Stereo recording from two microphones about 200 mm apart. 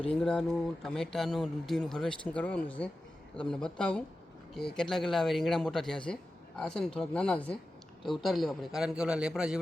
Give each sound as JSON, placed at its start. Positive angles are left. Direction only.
{"t": 0.1, "sound": "speech", "side_deg": 5}